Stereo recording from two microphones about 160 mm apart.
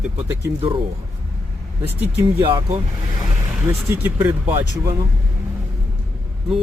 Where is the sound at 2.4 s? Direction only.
35° right (ahead or behind).